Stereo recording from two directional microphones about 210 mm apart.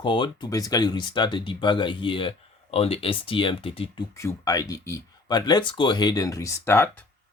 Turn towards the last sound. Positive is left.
turn(degrees=10)  # may be behind; listen again after turning